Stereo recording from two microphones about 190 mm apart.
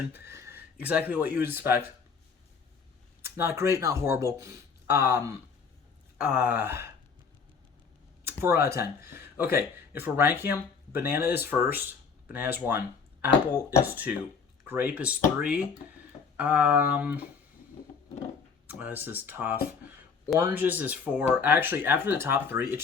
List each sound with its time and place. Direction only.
0.1 s speech: 10° right (ahead or behind)
3.2 s speech: 10° right (ahead or behind)
8.4 s speech: 15° right (ahead or behind)
13.8 s speech: 10° right (ahead or behind)
18.7 s speech: 10° right (ahead or behind)